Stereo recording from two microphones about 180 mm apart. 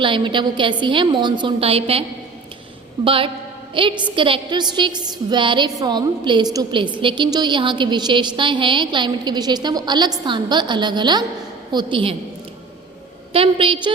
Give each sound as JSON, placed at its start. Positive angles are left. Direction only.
{"t": 0.0, "sound": "a woman's voice", "side_deg": -25}
{"t": 13.3, "sound": "a woman's voice", "side_deg": -30}